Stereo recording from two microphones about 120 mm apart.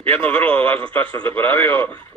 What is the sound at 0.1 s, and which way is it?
A man's voice, 15° left (ahead or behind).